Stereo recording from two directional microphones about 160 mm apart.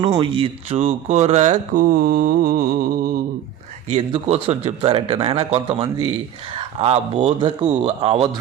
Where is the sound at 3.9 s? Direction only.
40° right (ahead or behind).